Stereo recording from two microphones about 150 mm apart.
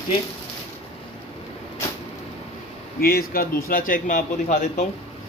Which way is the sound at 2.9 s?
90° left.